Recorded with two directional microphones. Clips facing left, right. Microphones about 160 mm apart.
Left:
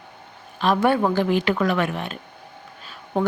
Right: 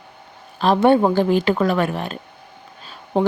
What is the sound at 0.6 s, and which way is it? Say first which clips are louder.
A woman's voice: right 5 dB; 30° right (ahead or behind).